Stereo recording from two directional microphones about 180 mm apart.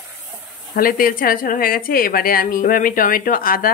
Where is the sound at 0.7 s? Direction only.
50° left (ahead or behind).